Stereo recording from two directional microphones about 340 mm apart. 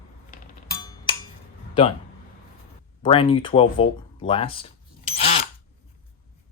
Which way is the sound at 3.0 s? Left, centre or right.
Centre.